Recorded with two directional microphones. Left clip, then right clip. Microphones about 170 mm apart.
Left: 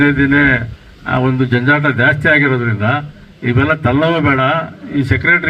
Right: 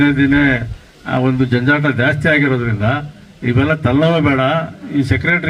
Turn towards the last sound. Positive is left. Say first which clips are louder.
# left 3 dB
turn(degrees=-25)  # may be behind; listen again after turning